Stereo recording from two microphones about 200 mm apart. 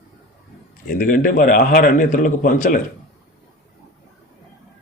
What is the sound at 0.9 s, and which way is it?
A man's voice, 40° left (ahead or behind).